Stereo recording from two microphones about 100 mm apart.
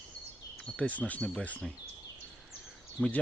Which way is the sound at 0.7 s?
15° left (ahead or behind).